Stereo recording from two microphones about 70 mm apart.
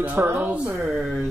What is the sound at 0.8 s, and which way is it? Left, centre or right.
Speech, centre.